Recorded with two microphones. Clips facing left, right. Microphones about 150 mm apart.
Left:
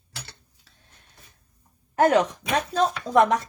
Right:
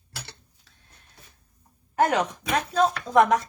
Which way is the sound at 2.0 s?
40° left (ahead or behind).